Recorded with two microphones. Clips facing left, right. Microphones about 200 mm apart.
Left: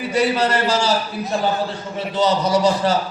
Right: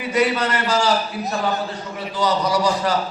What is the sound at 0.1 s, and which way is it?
Speech, 30° left (ahead or behind).